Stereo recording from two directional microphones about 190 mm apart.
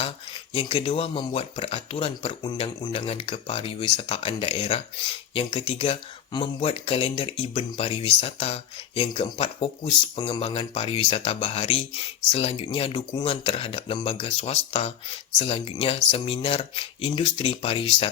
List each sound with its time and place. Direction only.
0.5 s speech: 30° left (ahead or behind)
2.9 s speech: 30° left (ahead or behind)